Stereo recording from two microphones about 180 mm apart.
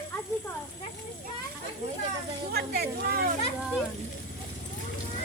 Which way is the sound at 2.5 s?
60° right (ahead or behind).